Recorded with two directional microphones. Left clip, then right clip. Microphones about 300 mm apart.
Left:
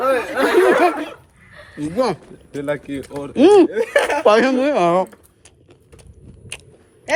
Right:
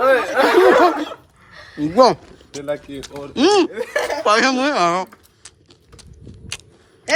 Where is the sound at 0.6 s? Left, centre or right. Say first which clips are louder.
Right 2 dB; centre.